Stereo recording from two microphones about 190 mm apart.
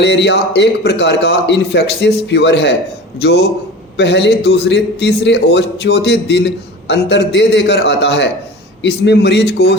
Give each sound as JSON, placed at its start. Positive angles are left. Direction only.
{"t": 0.0, "sound": "a man's voice", "side_deg": 65}